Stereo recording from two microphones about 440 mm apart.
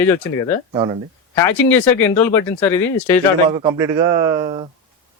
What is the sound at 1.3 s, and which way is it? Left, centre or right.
Speech, centre.